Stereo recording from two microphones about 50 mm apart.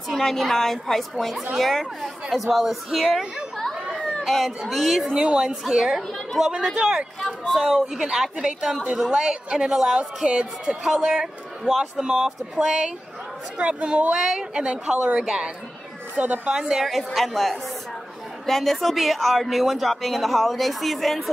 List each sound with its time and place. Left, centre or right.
0.1 s a woman's voice: centre
4.3 s speech: centre
5.1 s speech: centre
6.4 s speech: centre
6.7 s speech: centre
7.2 s a sound: centre
7.9 s speech: centre
9.9 s speech: right
13.6 s a woman's voice: right
14.1 s speech: centre
16.8 s speech: centre